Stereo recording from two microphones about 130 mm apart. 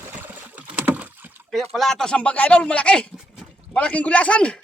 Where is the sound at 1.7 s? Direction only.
5° left (ahead or behind).